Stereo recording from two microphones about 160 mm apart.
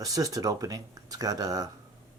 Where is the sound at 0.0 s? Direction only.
20° right (ahead or behind).